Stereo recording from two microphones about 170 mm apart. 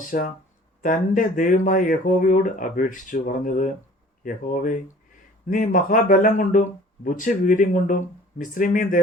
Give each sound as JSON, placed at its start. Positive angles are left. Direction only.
{"t": 0.0, "sound": "speech", "side_deg": 50}